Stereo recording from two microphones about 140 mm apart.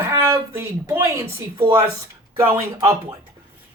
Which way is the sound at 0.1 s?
20° right (ahead or behind).